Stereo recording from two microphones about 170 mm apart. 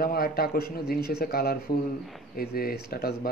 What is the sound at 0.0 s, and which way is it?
Speech, 60° left (ahead or behind).